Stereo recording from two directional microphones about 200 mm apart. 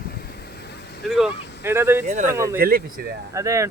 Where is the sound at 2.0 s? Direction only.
40° right (ahead or behind).